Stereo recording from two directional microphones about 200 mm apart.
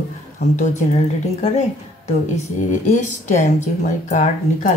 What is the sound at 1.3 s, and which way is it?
A woman's voice, 35° left (ahead or behind).